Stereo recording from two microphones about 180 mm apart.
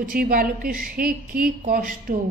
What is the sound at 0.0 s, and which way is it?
A woman's voice, 50° right (ahead or behind).